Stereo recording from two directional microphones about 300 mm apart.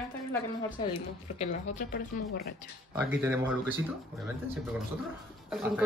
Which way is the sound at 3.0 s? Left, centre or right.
Centre.